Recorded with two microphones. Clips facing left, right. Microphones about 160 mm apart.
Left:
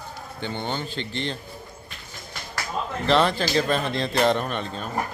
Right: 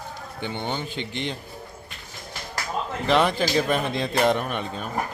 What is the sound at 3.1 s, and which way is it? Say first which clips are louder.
Speech: even; 10° right (ahead or behind).